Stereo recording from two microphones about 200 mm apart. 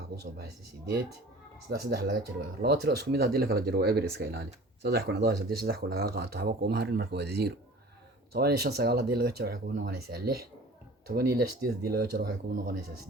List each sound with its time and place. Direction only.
1.7 s speech: 50° right (ahead or behind)